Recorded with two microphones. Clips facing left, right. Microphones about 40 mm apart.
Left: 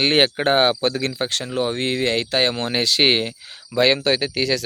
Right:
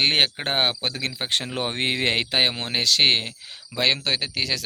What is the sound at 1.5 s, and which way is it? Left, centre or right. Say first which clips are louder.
Speech: left 5 dB; right.